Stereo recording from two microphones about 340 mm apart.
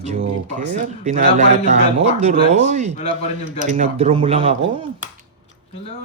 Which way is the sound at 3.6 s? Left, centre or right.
Right.